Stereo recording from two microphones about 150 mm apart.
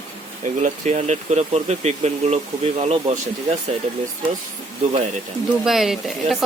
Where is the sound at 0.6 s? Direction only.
50° right (ahead or behind).